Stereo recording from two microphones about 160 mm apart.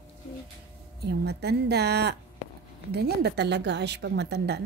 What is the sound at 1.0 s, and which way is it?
A woman's voice, 90° right.